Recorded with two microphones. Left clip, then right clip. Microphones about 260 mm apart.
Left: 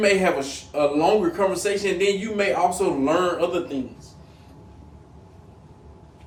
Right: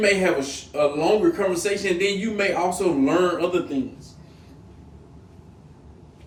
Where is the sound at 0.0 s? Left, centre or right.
Centre.